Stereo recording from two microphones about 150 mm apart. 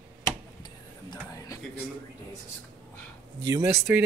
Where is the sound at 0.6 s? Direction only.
25° left (ahead or behind).